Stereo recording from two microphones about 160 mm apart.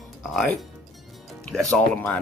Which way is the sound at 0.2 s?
Centre (ahead or behind).